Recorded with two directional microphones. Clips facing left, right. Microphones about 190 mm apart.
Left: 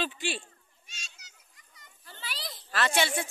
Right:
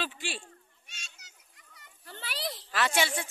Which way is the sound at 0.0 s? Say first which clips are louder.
Left 4 dB; centre (ahead or behind).